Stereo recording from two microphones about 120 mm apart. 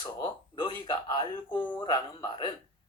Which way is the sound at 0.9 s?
35° left (ahead or behind).